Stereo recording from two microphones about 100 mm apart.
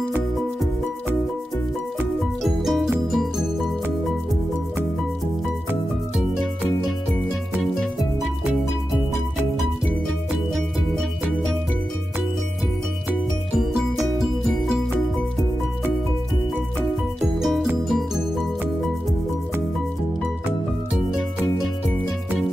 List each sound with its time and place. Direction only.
2.4 s music: centre (ahead or behind)
10.5 s music: 5° left (ahead or behind)
17.4 s music: centre (ahead or behind)